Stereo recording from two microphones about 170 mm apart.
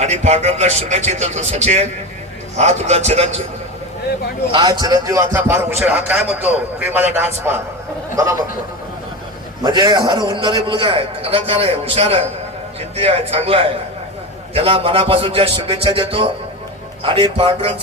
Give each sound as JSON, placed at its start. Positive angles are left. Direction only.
{"t": 0.0, "sound": "a man's voice", "side_deg": -40}
{"t": 4.5, "sound": "a man's voice", "side_deg": -25}
{"t": 9.6, "sound": "a man's voice", "side_deg": -25}